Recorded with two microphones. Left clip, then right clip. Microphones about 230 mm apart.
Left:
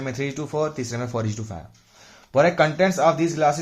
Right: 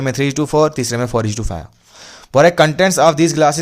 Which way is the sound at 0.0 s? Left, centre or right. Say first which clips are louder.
Right 10 dB; right.